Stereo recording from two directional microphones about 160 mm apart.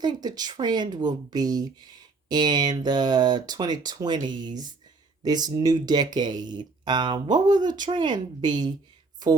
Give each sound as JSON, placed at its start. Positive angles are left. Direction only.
{"t": 0.0, "sound": "speech", "side_deg": -25}